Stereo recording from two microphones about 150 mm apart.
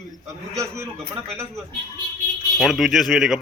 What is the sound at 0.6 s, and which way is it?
Speech, 20° right (ahead or behind).